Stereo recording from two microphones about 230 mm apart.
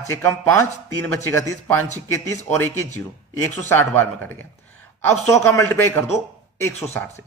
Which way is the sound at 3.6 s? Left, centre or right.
Centre.